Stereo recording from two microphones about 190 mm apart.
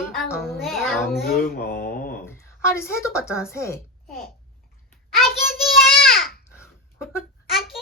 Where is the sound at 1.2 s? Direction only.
50° left (ahead or behind).